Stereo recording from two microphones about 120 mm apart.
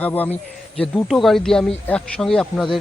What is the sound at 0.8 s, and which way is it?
Speech, centre (ahead or behind).